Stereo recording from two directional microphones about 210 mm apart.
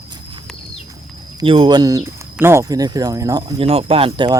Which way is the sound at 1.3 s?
25° right (ahead or behind).